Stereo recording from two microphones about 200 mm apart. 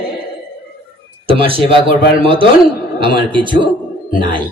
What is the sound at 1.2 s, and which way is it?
A man's voice, 25° right (ahead or behind).